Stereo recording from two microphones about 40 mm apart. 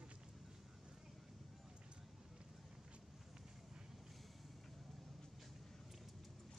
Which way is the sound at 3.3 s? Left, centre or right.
Centre.